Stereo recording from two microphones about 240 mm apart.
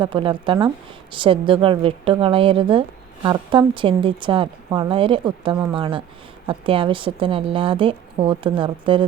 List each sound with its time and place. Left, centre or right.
0.0 s a woman's voice: right